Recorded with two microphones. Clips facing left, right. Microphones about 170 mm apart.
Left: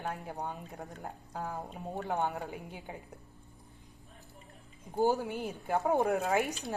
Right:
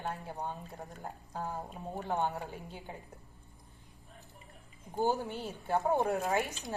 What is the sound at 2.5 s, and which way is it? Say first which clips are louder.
Speech: left 2 dB; 15° left (ahead or behind).